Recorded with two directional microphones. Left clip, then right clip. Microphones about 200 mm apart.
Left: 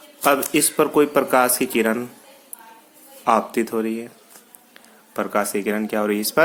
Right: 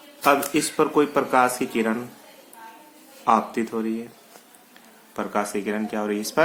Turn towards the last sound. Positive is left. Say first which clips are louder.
# left 5 dB
turn(degrees=35)  # may be behind; listen again after turning